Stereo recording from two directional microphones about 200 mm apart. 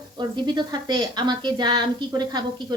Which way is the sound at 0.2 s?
20° right (ahead or behind).